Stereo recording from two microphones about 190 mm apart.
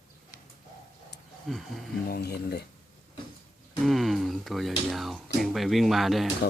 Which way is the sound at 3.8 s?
Centre (ahead or behind).